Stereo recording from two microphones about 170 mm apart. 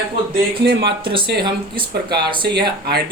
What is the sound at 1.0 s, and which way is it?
Speech, 30° right (ahead or behind).